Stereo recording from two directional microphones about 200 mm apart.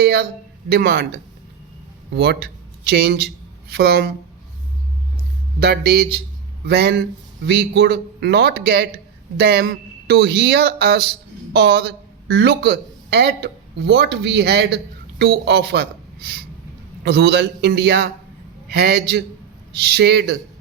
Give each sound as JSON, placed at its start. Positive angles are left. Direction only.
{"t": 0.0, "sound": "a man's voice", "side_deg": -50}
{"t": 2.1, "sound": "a man's voice", "side_deg": -55}
{"t": 5.5, "sound": "a man's voice", "side_deg": -55}
{"t": 17.0, "sound": "a man's voice", "side_deg": -55}